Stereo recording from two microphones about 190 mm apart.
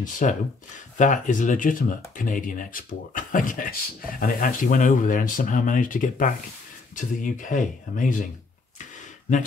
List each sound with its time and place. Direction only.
0.0 s speech: 40° left (ahead or behind)